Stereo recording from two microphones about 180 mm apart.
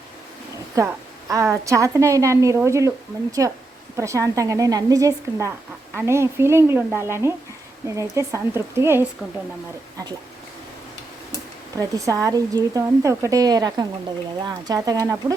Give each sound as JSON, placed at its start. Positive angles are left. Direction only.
{"t": 1.3, "sound": "a woman's voice", "side_deg": -15}
{"t": 11.8, "sound": "a woman's voice", "side_deg": -20}